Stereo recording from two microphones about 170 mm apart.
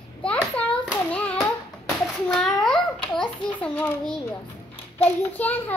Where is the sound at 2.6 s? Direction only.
5° left (ahead or behind).